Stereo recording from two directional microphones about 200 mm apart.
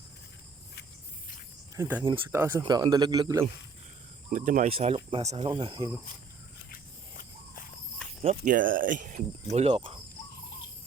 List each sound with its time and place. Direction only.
1.7 s speech: 10° right (ahead or behind)
4.3 s speech: 40° right (ahead or behind)
8.2 s speech: 35° right (ahead or behind)